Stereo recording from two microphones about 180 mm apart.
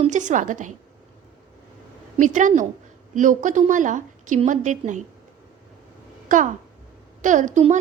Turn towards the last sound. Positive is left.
turn(degrees=-45)  # may be behind; listen again after turning